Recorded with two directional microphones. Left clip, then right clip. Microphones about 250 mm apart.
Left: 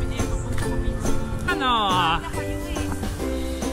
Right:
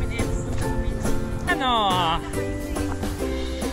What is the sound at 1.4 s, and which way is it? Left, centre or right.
Music, centre.